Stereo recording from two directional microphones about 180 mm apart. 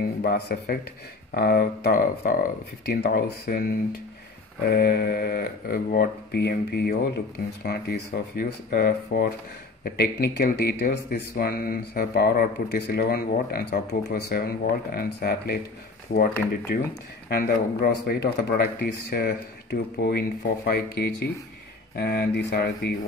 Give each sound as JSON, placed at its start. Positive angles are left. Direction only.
{"t": 0.0, "sound": "speech", "side_deg": 60}
{"t": 16.1, "sound": "speech", "side_deg": 50}